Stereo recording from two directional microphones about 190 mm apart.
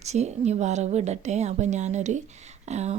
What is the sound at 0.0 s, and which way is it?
Speech, 35° right (ahead or behind).